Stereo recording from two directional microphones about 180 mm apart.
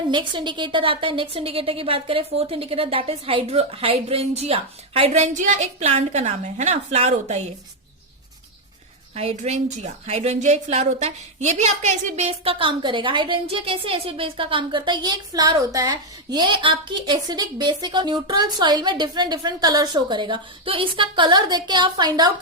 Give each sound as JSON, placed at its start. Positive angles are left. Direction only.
{"t": 0.1, "sound": "a woman's voice", "side_deg": -25}
{"t": 9.1, "sound": "a woman's voice", "side_deg": -35}